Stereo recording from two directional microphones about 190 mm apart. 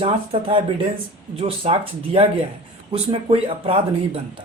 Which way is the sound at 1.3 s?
30° right (ahead or behind).